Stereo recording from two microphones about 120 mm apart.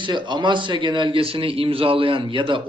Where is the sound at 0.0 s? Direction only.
40° right (ahead or behind).